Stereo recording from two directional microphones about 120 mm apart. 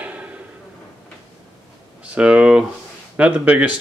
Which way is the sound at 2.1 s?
10° right (ahead or behind).